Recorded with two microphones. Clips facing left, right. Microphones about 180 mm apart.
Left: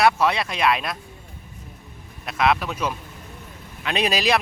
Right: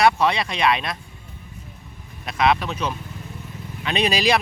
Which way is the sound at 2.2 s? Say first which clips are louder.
Right 1 dB; centre (ahead or behind).